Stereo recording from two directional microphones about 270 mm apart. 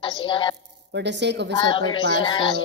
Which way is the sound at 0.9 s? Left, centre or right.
Right.